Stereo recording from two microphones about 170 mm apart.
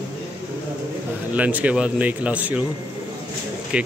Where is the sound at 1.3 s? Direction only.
10° right (ahead or behind).